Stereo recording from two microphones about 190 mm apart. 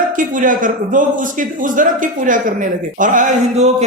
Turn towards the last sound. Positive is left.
turn(degrees=-40)  # may be behind; listen again after turning